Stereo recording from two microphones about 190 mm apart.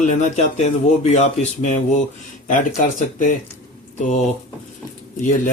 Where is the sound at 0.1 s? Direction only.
40° left (ahead or behind).